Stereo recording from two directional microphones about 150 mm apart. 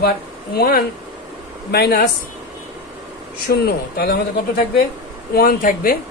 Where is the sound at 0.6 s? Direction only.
90° left.